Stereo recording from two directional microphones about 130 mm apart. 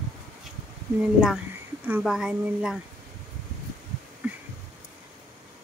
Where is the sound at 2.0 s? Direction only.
5° right (ahead or behind).